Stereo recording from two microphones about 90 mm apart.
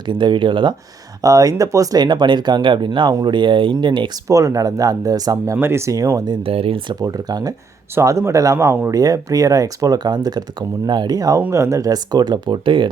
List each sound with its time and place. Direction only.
0.0 s speech: 60° right (ahead or behind)
1.2 s speech: 40° right (ahead or behind)
2.0 s speech: 60° right (ahead or behind)
4.3 s speech: 35° right (ahead or behind)
5.5 s speech: 30° right (ahead or behind)
6.1 s speech: 55° right (ahead or behind)
6.4 s speech: 90° right
7.0 s speech: 45° right (ahead or behind)
7.9 s speech: 30° right (ahead or behind)
11.5 s speech: 35° right (ahead or behind); by 12.9 s 65° right (ahead or behind)